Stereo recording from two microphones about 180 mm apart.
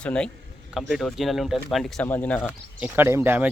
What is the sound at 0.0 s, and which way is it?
Speech, 5° left (ahead or behind).